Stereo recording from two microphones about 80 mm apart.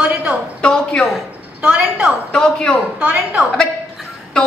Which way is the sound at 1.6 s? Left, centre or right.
Centre.